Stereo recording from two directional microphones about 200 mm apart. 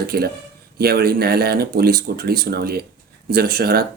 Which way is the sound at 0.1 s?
50° right (ahead or behind).